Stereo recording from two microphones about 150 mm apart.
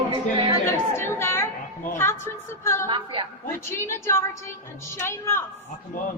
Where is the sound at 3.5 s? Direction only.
15° left (ahead or behind).